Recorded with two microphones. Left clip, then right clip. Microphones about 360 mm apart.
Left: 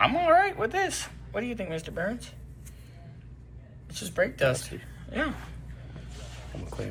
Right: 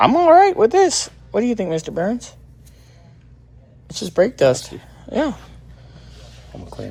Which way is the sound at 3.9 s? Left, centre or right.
Centre.